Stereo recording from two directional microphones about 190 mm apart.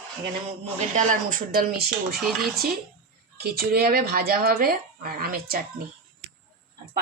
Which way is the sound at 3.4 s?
55° right (ahead or behind).